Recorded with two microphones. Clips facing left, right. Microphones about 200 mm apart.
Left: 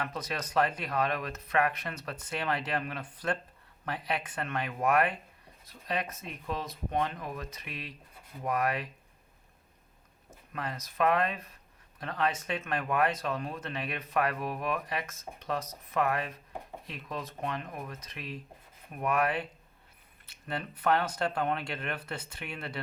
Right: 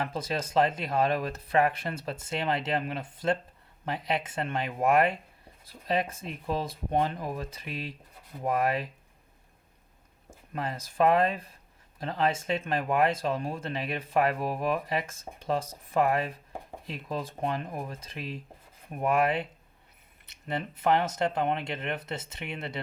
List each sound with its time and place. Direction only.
0.0 s speech: 30° right (ahead or behind)
10.5 s speech: 30° right (ahead or behind)